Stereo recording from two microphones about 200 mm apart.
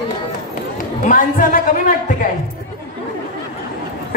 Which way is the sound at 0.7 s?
40° left (ahead or behind).